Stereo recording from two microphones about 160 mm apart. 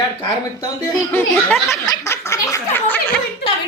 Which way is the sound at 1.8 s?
20° left (ahead or behind).